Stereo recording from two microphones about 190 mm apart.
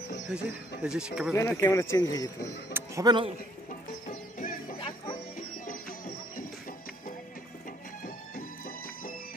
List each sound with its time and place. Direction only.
0.3 s speech: 5° right (ahead or behind)
1.3 s speech: 15° left (ahead or behind)
2.7 s speech: 15° right (ahead or behind)
4.1 s music: 45° left (ahead or behind)
4.7 s music: 30° left (ahead or behind)
5.7 s music: 45° left (ahead or behind)
8.0 s music: 45° left (ahead or behind)